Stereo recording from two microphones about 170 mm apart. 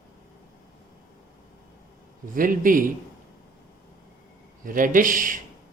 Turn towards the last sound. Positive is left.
turn(degrees=-50)  # may be behind; listen again after turning